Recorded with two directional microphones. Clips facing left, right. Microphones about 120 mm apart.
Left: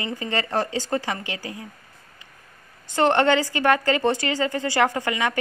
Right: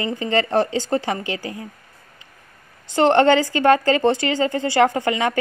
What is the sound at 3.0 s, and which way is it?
A woman's voice, 30° right (ahead or behind).